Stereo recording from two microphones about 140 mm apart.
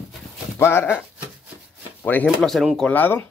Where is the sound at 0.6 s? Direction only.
15° left (ahead or behind).